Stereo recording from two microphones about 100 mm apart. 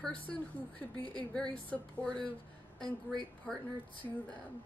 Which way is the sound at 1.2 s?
10° left (ahead or behind).